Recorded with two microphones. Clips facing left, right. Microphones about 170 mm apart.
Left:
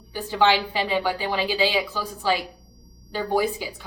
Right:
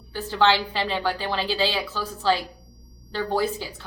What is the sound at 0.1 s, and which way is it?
A woman's voice, 15° left (ahead or behind).